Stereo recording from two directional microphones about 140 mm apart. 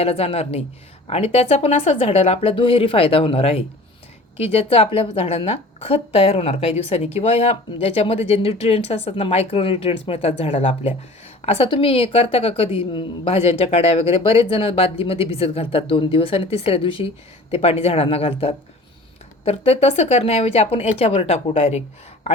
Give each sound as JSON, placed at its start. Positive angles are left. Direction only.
{"t": 0.0, "sound": "a woman's voice", "side_deg": 45}